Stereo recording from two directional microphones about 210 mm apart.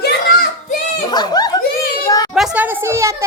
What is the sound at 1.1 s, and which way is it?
Speech, 20° left (ahead or behind).